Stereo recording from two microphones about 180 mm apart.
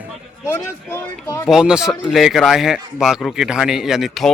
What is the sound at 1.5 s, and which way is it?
Speech, 5° right (ahead or behind).